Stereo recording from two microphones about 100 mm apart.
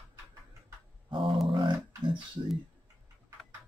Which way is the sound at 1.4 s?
60° right (ahead or behind).